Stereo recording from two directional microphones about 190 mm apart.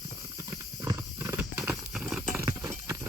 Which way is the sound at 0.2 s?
15° right (ahead or behind).